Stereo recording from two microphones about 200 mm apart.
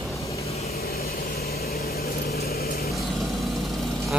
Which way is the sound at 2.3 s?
50° left (ahead or behind).